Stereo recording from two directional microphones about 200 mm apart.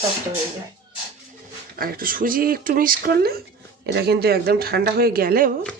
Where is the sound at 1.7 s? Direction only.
45° right (ahead or behind).